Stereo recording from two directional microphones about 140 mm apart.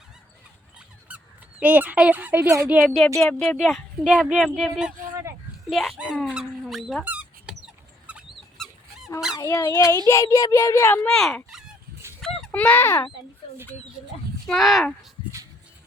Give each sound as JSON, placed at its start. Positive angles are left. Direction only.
{"t": 1.0, "sound": "speech", "side_deg": -10}
{"t": 2.8, "sound": "a woman's voice", "side_deg": 0}
{"t": 6.3, "sound": "squeak", "side_deg": -5}
{"t": 8.5, "sound": "a sound", "side_deg": 0}
{"t": 9.4, "sound": "a child's voice", "side_deg": 25}
{"t": 11.1, "sound": "speech", "side_deg": 5}
{"t": 12.5, "sound": "speech", "side_deg": 10}
{"t": 14.4, "sound": "a woman's voice", "side_deg": 0}